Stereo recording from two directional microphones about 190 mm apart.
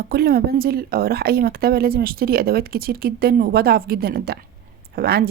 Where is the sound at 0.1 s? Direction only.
55° right (ahead or behind).